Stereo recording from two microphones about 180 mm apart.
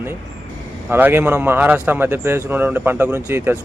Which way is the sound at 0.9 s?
10° right (ahead or behind).